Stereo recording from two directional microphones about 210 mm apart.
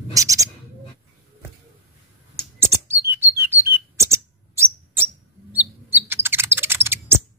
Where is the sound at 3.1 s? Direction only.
10° right (ahead or behind).